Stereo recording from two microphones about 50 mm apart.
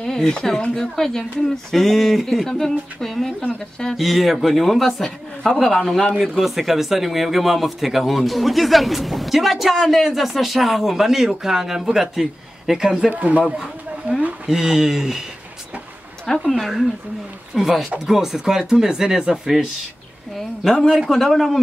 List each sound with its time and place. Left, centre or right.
0.0 s speech: centre
5.0 s a woman's voice: centre
13.1 s a man's voice: right
14.4 s speech: centre
16.5 s speech: centre
21.1 s speech: centre